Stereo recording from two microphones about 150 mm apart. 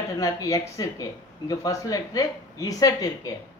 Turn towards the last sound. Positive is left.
turn(degrees=25)  # may be behind; listen again after turning